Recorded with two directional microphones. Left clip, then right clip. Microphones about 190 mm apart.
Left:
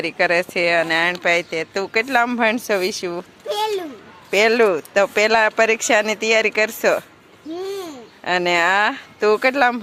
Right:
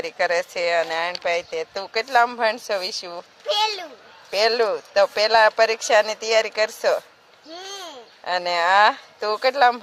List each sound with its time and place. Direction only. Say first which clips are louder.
0.0 s a child's voice: left 4 dB; centre (ahead or behind)